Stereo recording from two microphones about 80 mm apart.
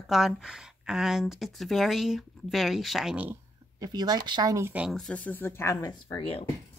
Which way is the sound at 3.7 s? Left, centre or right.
Right.